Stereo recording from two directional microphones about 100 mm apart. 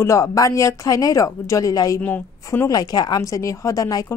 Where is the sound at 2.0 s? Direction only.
15° left (ahead or behind).